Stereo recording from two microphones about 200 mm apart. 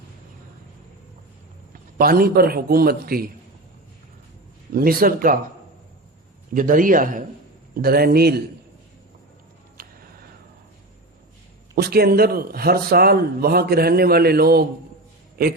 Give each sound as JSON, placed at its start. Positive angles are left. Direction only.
{"t": 2.0, "sound": "speech", "side_deg": -45}
{"t": 4.7, "sound": "speech", "side_deg": -45}
{"t": 6.5, "sound": "speech", "side_deg": -40}
{"t": 11.7, "sound": "speech", "side_deg": -50}